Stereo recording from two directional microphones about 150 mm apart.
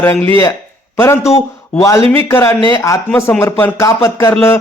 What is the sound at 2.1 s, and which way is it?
Speech, 15° left (ahead or behind).